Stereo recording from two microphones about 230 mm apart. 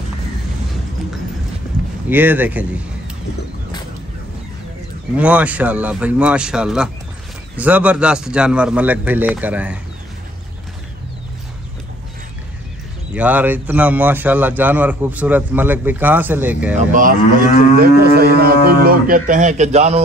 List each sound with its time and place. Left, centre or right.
2.0 s a man's voice: centre
5.1 s a man's voice: centre
13.1 s a man's voice: centre
16.9 s moo: right